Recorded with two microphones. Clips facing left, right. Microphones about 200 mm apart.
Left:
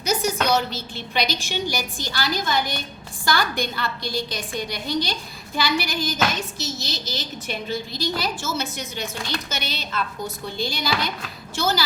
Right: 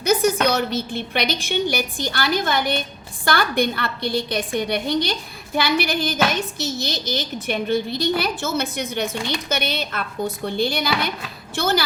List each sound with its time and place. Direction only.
0.0 s a woman's voice: 55° right (ahead or behind)